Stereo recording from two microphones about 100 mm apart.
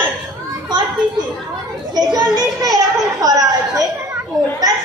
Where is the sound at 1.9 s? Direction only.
45° right (ahead or behind).